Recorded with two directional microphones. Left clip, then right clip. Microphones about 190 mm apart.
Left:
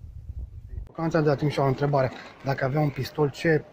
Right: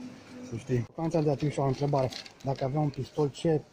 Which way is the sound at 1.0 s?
40° right (ahead or behind).